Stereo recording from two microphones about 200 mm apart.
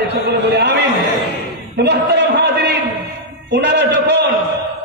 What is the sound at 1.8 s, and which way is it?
A man's voice, 55° right (ahead or behind).